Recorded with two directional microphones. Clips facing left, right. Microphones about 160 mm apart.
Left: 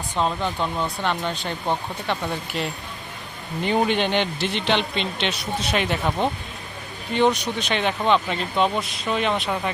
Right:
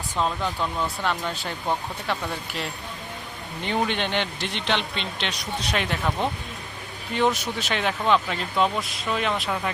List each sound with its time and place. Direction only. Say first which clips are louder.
0.2 s speech: left 2 dB; 25° left (ahead or behind)
1.2 s speech: left 3 dB; 5° right (ahead or behind)